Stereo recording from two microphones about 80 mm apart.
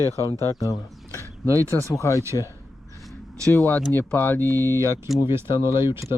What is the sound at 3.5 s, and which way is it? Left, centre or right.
Speech, left.